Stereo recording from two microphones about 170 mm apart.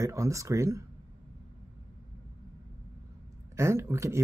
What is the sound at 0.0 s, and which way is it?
Speech, 20° right (ahead or behind).